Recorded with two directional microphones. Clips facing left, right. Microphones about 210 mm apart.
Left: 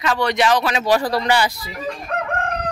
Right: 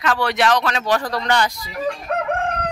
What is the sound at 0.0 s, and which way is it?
Speech, centre (ahead or behind).